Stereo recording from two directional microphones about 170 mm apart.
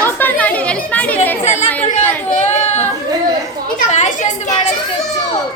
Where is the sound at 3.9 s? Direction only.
45° left (ahead or behind).